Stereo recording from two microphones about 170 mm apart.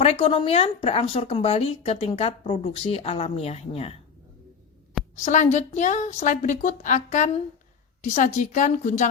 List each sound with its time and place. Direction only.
0.0 s speech: 35° left (ahead or behind)
5.1 s a woman's voice: 45° left (ahead or behind)